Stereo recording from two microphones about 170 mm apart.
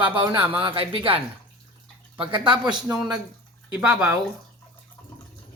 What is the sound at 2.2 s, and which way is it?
Speech, 30° right (ahead or behind).